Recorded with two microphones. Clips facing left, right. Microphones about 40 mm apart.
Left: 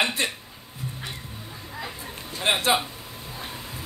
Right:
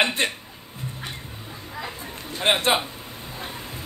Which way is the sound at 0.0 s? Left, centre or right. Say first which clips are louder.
Right 3 dB; right.